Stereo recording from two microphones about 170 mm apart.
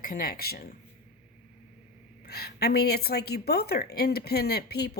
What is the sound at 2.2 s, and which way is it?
A woman's voice, 70° left (ahead or behind).